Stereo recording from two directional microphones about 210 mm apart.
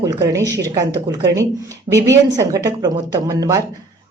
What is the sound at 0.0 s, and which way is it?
A woman's voice, 15° right (ahead or behind).